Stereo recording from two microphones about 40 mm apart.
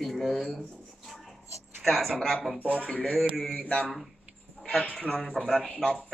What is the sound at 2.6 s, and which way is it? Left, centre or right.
Speech, right.